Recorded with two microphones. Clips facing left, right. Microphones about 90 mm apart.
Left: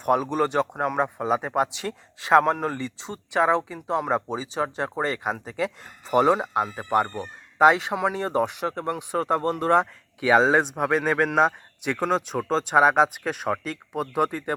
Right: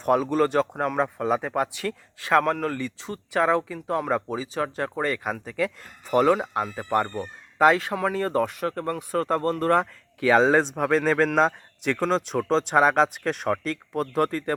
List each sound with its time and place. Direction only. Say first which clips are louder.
0.0 s a man's voice: right 1 dB; 10° left (ahead or behind)